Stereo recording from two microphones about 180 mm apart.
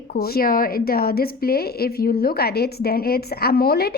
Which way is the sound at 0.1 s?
60° left (ahead or behind).